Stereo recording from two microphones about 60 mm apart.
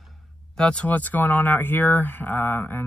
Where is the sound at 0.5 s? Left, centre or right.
Centre.